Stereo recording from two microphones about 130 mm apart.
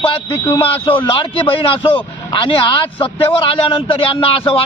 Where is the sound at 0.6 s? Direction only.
45° left (ahead or behind).